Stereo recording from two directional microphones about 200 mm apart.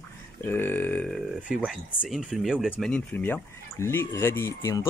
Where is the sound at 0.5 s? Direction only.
10° left (ahead or behind).